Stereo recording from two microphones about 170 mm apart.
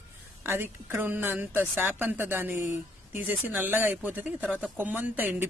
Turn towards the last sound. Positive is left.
turn(degrees=-10)  # may be behind; listen again after turning